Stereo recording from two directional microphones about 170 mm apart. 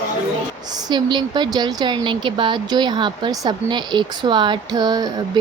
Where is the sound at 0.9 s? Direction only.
25° right (ahead or behind).